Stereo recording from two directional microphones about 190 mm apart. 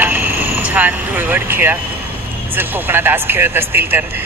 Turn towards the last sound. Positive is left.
turn(degrees=-10)  # may be behind; listen again after turning